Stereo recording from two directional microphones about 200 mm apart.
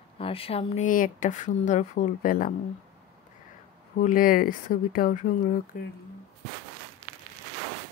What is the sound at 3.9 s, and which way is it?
Speech, 45° left (ahead or behind).